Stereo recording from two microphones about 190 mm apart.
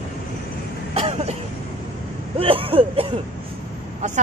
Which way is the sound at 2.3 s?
30° right (ahead or behind).